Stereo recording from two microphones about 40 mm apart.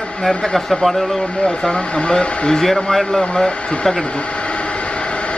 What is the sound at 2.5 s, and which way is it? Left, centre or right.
A man's voice, centre.